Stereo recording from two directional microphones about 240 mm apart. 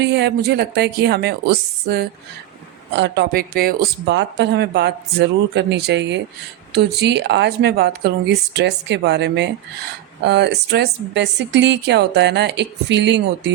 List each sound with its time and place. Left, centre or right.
0.0 s speech: right